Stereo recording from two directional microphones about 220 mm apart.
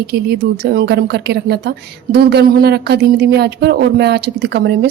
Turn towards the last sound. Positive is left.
turn(degrees=-50)  # may be behind; listen again after turning